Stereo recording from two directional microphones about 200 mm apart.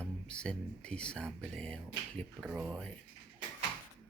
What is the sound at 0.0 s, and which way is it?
Speech, 5° left (ahead or behind).